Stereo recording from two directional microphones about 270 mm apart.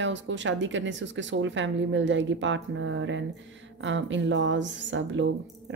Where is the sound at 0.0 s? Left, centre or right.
Right.